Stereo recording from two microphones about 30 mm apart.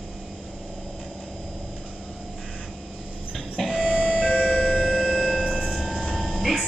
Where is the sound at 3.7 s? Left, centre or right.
Right.